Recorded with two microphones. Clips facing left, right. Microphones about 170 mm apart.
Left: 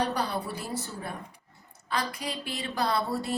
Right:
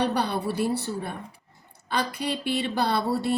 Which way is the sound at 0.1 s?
65° right (ahead or behind).